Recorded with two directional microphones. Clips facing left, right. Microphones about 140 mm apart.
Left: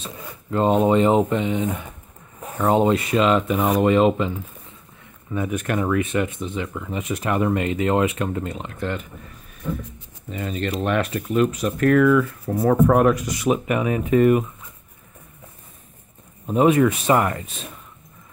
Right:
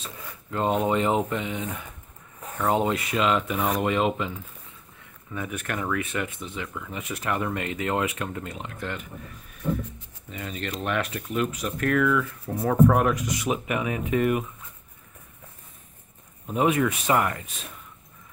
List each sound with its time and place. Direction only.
0.0 s speech: 30° left (ahead or behind)
5.3 s speech: 25° left (ahead or behind)
10.3 s speech: 35° left (ahead or behind)
16.4 s speech: 35° left (ahead or behind)